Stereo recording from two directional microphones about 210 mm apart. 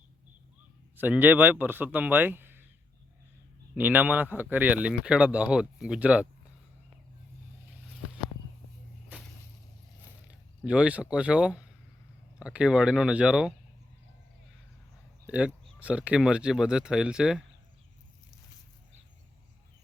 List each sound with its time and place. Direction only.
0.9 s speech: 10° right (ahead or behind)
3.8 s speech: 10° right (ahead or behind)
10.2 s speech: 5° right (ahead or behind)
15.3 s speech: 5° right (ahead or behind)